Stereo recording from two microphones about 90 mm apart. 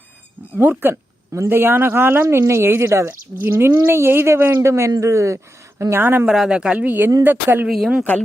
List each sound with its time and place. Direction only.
0.5 s speech: 20° right (ahead or behind)
2.2 s a woman's voice: 35° right (ahead or behind)
6.2 s speech: 5° right (ahead or behind); by 7.7 s 20° right (ahead or behind)